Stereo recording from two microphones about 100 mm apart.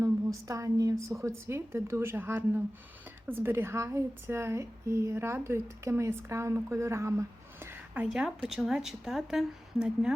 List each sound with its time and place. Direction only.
0.0 s a woman's voice: 35° right (ahead or behind)
8.0 s a woman's voice: 5° right (ahead or behind)